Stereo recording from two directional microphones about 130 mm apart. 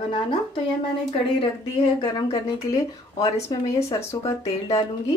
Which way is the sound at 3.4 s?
25° left (ahead or behind).